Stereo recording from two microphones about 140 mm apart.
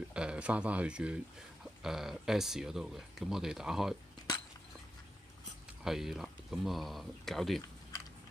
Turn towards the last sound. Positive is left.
turn(degrees=0)  # may be behind; listen again after turning